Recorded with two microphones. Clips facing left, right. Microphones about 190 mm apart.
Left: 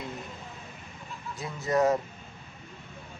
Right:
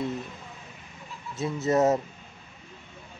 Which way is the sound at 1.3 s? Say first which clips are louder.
Right 4 dB; 25° right (ahead or behind).